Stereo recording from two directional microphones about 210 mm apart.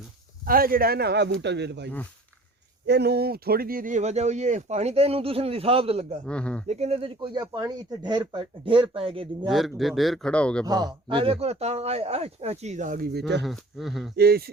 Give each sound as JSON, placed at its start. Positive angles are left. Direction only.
{"t": 0.4, "sound": "a man's voice", "side_deg": -45}
{"t": 6.2, "sound": "a man's voice", "side_deg": 5}
{"t": 6.7, "sound": "speech", "side_deg": -30}
{"t": 9.5, "sound": "a man's voice", "side_deg": 0}
{"t": 10.7, "sound": "speech", "side_deg": -20}
{"t": 13.4, "sound": "a man's voice", "side_deg": 0}
{"t": 14.2, "sound": "a man's voice", "side_deg": -50}